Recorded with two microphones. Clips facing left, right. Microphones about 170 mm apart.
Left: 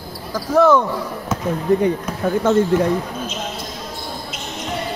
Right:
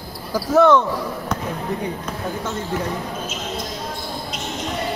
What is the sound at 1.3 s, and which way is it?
Basketball bounce, 5° left (ahead or behind).